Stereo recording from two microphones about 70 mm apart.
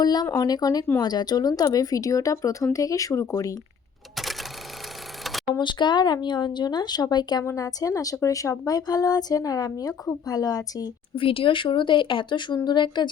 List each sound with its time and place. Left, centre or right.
0.0 s speech: left
0.3 s speech: left
5.5 s speech: left
7.4 s speech: left
11.9 s speech: left